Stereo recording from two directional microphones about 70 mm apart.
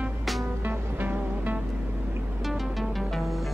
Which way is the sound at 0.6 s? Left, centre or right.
Right.